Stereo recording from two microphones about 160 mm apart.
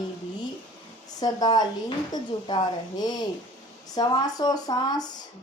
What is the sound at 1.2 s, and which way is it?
Speech, 25° left (ahead or behind).